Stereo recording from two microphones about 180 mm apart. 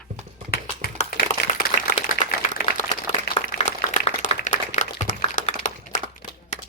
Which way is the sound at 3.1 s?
40° left (ahead or behind).